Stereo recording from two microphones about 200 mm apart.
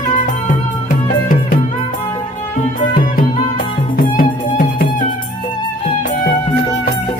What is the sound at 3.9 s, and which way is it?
Music, 45° left (ahead or behind).